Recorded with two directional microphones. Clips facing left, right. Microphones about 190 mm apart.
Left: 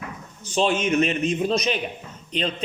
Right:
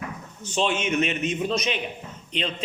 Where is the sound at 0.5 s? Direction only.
40° left (ahead or behind).